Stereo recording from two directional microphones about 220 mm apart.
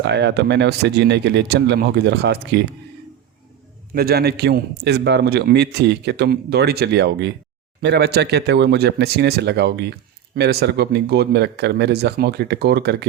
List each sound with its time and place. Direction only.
0.0 s a man's voice: 50° right (ahead or behind)
3.9 s a man's voice: 45° right (ahead or behind)